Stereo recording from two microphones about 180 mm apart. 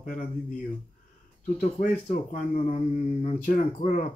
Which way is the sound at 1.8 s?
45° left (ahead or behind).